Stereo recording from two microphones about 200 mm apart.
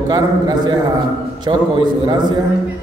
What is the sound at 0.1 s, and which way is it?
Speech, 20° right (ahead or behind).